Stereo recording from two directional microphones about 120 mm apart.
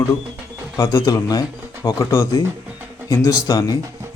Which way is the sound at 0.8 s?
30° left (ahead or behind).